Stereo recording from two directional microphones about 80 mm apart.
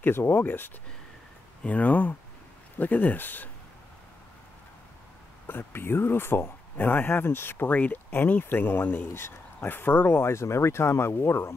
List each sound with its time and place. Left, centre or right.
0.0 s speech: left
5.5 s speech: left